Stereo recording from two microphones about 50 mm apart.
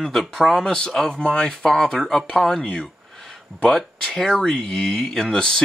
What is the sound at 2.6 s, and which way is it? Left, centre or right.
Speech, left.